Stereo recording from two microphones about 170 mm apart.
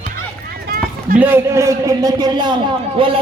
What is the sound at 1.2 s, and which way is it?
A man's voice, 15° right (ahead or behind).